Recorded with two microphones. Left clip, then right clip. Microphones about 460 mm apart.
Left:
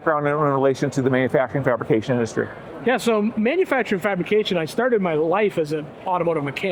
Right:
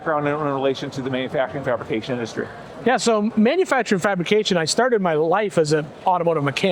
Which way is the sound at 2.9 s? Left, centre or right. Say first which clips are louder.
Right 1 dB; centre.